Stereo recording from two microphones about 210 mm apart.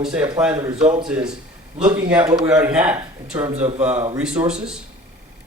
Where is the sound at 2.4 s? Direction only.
5° right (ahead or behind).